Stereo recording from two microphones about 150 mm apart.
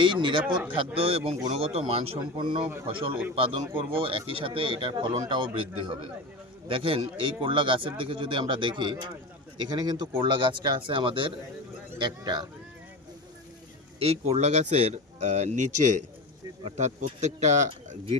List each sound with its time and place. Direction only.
0.0 s speech: 35° right (ahead or behind)
14.0 s speech: 45° right (ahead or behind)
16.6 s speech: 50° right (ahead or behind)